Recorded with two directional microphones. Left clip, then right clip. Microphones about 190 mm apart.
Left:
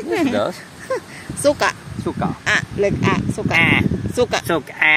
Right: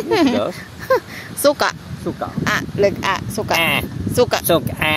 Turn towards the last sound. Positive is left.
turn(degrees=-60)  # may be behind; listen again after turning